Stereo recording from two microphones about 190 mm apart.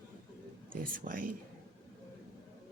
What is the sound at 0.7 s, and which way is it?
Speech, 45° right (ahead or behind).